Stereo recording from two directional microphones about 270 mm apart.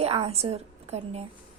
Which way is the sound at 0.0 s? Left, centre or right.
Right.